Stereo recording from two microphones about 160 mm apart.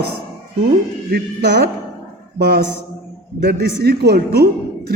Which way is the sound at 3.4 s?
90° right.